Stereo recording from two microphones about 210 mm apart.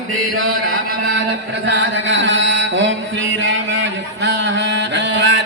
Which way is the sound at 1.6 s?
60° right (ahead or behind).